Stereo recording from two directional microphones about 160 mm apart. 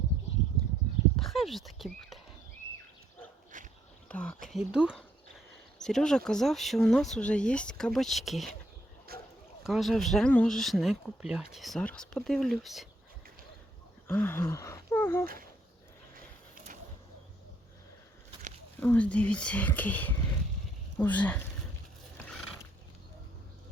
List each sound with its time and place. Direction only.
1.2 s speech: centre (ahead or behind)
3.5 s a sound: 55° right (ahead or behind)
4.1 s speech: 10° left (ahead or behind)
4.4 s speech: 5° right (ahead or behind)
9.1 s a sound: 70° right (ahead or behind)
9.6 s speech: centre (ahead or behind)
14.1 s speech: 10° left (ahead or behind)
18.8 s speech: 10° left (ahead or behind)